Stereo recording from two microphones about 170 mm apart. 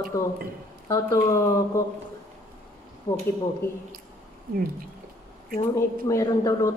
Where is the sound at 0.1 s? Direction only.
20° left (ahead or behind).